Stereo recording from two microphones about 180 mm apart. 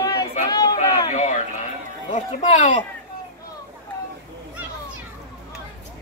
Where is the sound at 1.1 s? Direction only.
40° left (ahead or behind).